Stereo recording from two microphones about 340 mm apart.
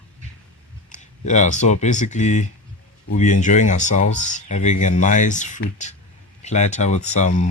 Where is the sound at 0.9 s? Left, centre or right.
Left.